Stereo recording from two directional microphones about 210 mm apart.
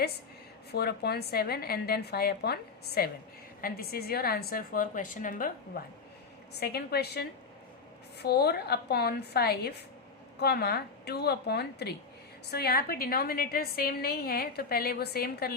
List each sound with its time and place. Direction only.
0.7 s a woman's voice: 50° left (ahead or behind)
6.6 s a woman's voice: 50° left (ahead or behind)